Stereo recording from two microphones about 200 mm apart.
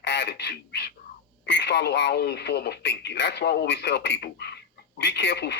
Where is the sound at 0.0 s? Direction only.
60° left (ahead or behind).